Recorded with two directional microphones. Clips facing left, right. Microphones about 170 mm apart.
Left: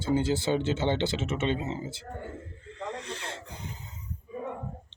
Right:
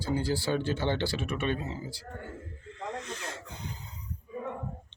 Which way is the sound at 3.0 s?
30° left (ahead or behind).